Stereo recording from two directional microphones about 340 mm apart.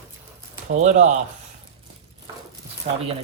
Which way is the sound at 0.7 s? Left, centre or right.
Centre.